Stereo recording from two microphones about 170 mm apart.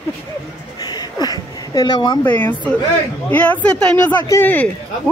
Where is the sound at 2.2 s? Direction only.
10° left (ahead or behind).